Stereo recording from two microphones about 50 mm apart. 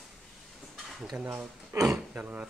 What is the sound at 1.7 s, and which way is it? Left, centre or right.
Speech, right.